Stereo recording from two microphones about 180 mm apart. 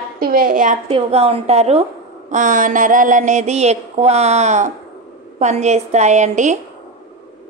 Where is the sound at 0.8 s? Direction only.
35° right (ahead or behind).